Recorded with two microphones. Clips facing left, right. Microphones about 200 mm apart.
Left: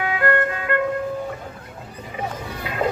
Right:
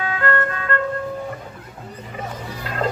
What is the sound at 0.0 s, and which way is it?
Music, 15° left (ahead or behind).